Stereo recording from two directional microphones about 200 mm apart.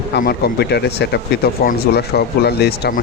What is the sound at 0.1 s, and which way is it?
Speech, 50° left (ahead or behind).